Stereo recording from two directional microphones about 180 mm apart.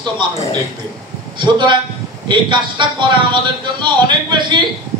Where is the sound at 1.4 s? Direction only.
25° right (ahead or behind).